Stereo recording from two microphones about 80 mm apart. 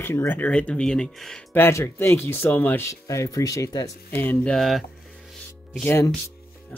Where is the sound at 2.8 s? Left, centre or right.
Left.